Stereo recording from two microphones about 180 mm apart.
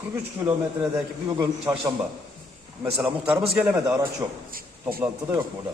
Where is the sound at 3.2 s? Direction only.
10° right (ahead or behind).